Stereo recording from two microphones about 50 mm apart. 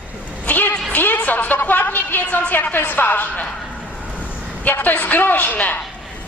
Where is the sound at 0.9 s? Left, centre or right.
Left.